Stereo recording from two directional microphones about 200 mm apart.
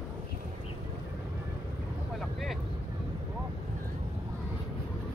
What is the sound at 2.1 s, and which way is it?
Vehicle, centre (ahead or behind).